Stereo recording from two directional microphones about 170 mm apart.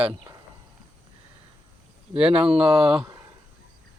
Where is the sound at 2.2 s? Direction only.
5° right (ahead or behind).